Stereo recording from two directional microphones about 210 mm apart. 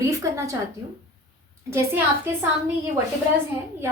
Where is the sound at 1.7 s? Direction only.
10° right (ahead or behind).